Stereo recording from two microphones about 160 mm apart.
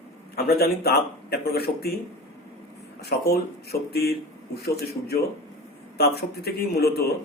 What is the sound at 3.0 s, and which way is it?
Speech, 85° left.